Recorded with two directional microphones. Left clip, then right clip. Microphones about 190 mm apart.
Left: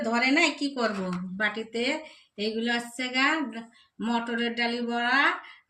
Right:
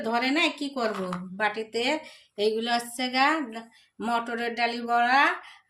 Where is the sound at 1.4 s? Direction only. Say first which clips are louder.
Right 1 dB; 70° right (ahead or behind).